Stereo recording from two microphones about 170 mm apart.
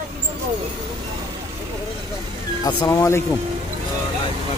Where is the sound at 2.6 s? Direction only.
20° left (ahead or behind).